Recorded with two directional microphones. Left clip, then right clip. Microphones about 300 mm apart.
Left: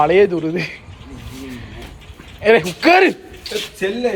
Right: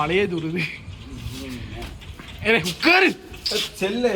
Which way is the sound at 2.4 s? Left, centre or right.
Centre.